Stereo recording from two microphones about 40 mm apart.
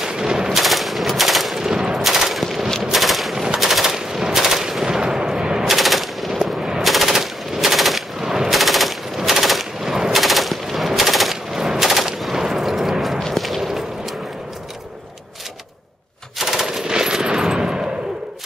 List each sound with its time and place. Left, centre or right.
0.0 s machine gun: centre
0.5 s machine gun: centre
1.6 s machine gun: centre
5.7 s machine gun: centre
6.4 s machine gun: centre
9.8 s machine gun: centre
10.1 s machine gun: centre
12.2 s a sound: centre
13.2 s whip: centre
13.6 s whip: centre
16.3 s machine gun: centre